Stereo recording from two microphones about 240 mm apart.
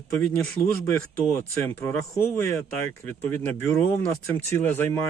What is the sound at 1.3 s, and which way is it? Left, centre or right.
Speech, centre.